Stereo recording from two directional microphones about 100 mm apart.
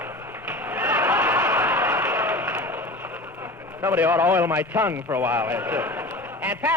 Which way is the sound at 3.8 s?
20° right (ahead or behind).